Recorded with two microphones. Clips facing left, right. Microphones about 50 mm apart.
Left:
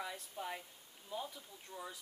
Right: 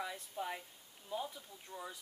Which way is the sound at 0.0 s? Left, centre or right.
Centre.